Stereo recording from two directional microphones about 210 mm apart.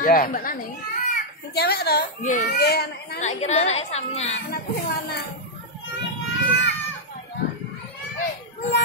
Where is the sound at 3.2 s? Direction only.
30° left (ahead or behind).